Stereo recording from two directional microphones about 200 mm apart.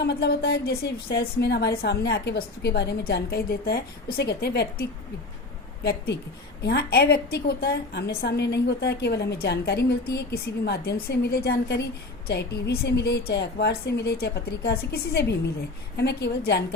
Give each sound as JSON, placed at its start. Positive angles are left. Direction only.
{"t": 0.0, "sound": "a woman's voice", "side_deg": 55}